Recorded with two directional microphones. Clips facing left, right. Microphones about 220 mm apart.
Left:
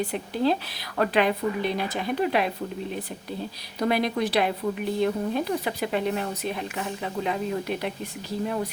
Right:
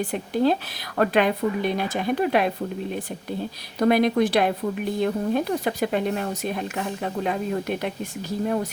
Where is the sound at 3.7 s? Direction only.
50° right (ahead or behind).